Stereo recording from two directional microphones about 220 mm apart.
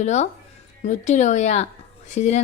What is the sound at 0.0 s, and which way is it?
A woman's voice, 30° left (ahead or behind).